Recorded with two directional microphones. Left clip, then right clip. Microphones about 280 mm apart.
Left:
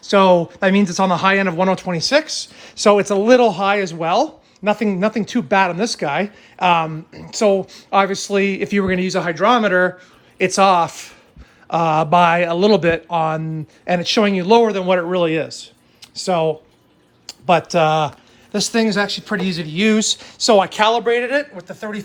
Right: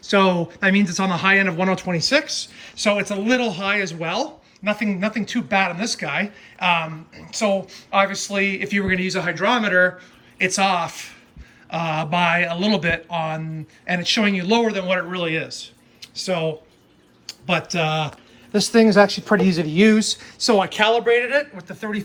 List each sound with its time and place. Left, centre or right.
0.0 s speech: centre
19.9 s speech: centre